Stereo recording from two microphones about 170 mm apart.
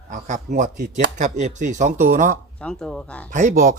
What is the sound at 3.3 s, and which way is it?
Speech, 50° right (ahead or behind).